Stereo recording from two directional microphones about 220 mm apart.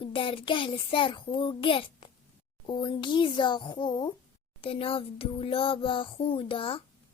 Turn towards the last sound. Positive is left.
turn(degrees=25)  # may be behind; listen again after turning